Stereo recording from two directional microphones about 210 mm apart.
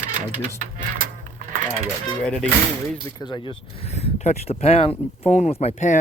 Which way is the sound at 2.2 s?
5° left (ahead or behind).